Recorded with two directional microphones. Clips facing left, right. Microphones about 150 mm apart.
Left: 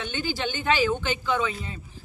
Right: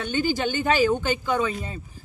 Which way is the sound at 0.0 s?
40° right (ahead or behind).